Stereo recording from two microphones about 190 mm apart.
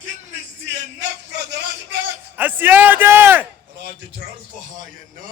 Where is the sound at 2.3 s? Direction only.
10° right (ahead or behind).